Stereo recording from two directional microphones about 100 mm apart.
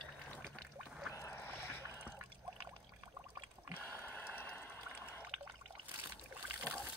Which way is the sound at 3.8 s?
20° left (ahead or behind).